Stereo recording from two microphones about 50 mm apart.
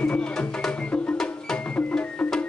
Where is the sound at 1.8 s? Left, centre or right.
Left.